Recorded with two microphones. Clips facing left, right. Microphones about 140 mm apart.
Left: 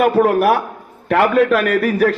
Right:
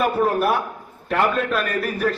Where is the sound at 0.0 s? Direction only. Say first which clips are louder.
Left 6 dB; 75° left (ahead or behind).